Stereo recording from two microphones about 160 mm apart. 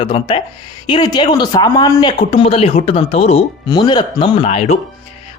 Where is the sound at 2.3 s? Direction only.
40° left (ahead or behind).